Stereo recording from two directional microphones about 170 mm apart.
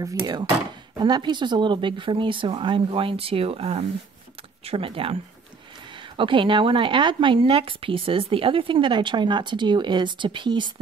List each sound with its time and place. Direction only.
0.0 s speech: 20° right (ahead or behind)